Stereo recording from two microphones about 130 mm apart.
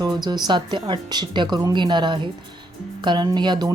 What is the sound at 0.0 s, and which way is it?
A woman's voice, 30° right (ahead or behind).